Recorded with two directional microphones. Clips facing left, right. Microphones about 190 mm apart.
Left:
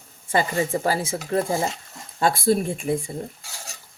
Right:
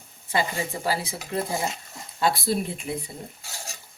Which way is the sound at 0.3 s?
50° left (ahead or behind).